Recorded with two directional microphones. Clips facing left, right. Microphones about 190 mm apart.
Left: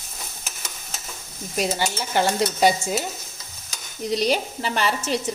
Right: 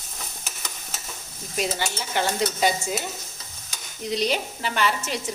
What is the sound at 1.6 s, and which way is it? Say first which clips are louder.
Speech: left 3 dB; 40° left (ahead or behind).